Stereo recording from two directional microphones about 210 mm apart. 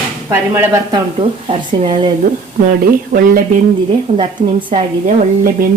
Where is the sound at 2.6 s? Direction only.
40° right (ahead or behind).